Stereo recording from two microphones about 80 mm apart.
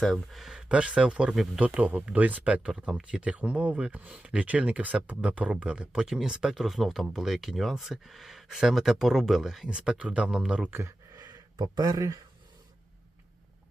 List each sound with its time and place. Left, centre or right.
0.0 s speech: centre
0.5 s speech: centre
9.7 s speech: centre
10.7 s a sound: right
11.2 s speech: right